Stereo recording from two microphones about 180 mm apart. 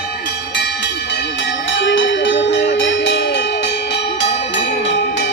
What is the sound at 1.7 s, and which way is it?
Music, 90° left.